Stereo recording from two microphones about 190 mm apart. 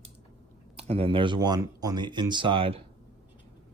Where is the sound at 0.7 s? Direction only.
30° right (ahead or behind).